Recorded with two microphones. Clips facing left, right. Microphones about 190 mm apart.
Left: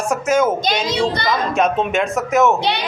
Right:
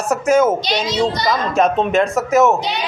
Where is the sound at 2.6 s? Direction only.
65° left (ahead or behind).